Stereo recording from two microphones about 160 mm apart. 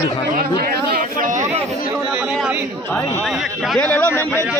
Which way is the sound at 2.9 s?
15° left (ahead or behind).